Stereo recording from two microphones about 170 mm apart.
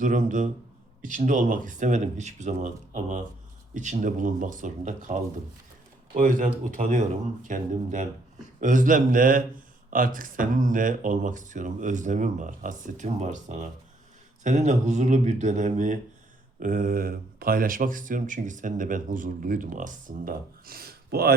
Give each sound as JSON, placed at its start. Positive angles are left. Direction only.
{"t": 0.0, "sound": "speech", "side_deg": -50}